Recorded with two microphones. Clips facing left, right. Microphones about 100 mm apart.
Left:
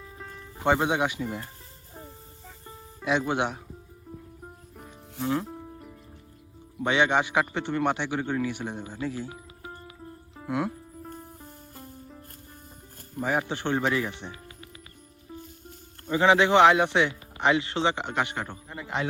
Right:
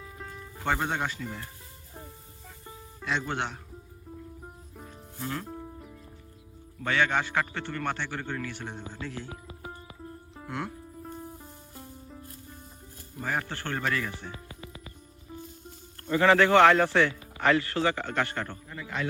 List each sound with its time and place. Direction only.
0.0 s music: centre (ahead or behind)
0.5 s speech: 15° left (ahead or behind)
1.9 s music: 30° left (ahead or behind)
2.6 s music: centre (ahead or behind)
3.1 s speech: 10° left (ahead or behind)
4.7 s music: 10° left (ahead or behind)
5.2 s speech: 20° left (ahead or behind)
5.5 s music: centre (ahead or behind)
6.7 s speech: 15° left (ahead or behind)
10.3 s music: 5° left (ahead or behind)
13.2 s speech: 15° left (ahead or behind)
16.0 s speech: 15° left (ahead or behind)
18.7 s speech: 25° left (ahead or behind)